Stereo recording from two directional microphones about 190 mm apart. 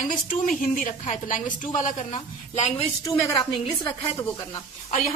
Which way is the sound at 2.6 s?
35° left (ahead or behind).